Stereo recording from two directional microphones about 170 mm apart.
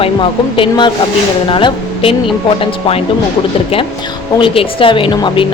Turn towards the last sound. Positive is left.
turn(degrees=30)  # may be behind; listen again after turning